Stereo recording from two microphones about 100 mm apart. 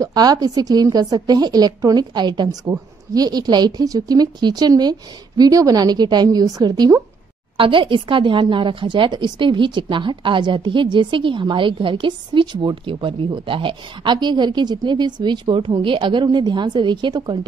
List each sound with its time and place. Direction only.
0.0 s a woman's voice: 40° right (ahead or behind)
7.5 s speech: 60° right (ahead or behind)